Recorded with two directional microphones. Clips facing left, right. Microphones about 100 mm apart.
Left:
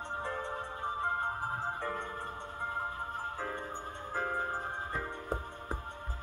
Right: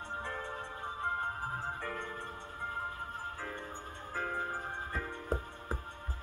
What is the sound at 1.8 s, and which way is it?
Music, 20° left (ahead or behind).